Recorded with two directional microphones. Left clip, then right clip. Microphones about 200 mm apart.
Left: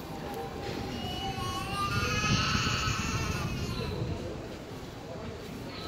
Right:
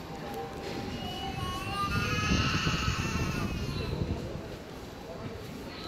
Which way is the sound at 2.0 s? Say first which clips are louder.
Left 1 dB; 55° left (ahead or behind).